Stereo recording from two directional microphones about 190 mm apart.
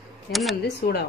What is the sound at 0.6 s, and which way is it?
Speech, 60° left (ahead or behind).